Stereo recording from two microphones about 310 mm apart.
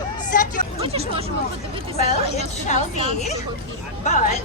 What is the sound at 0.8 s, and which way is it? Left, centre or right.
Speech, centre.